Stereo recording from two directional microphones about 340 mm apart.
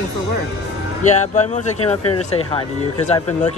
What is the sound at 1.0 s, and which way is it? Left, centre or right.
Speech, left.